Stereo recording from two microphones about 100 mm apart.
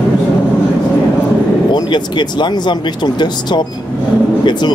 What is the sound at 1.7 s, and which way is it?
Speech, 50° left (ahead or behind).